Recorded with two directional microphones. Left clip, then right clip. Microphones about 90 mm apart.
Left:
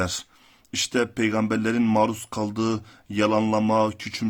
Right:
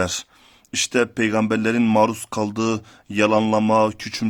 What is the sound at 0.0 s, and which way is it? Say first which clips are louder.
Speech: right 4 dB; 50° right (ahead or behind).